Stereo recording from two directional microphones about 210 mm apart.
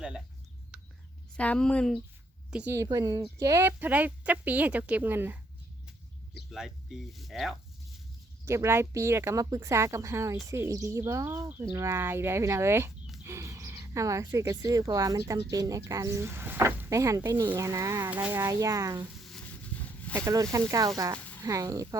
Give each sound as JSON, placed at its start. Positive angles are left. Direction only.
{"t": 1.4, "sound": "speech", "side_deg": 5}
{"t": 2.5, "sound": "speech", "side_deg": -5}
{"t": 6.5, "sound": "speech", "side_deg": 0}
{"t": 8.4, "sound": "speech", "side_deg": -10}
{"t": 19.2, "sound": "a sound", "side_deg": 5}
{"t": 20.2, "sound": "speech", "side_deg": -15}